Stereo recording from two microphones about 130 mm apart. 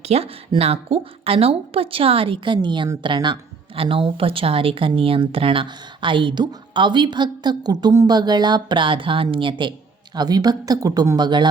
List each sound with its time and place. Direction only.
0.0 s a woman's voice: 50° right (ahead or behind); by 11.4 s 35° right (ahead or behind)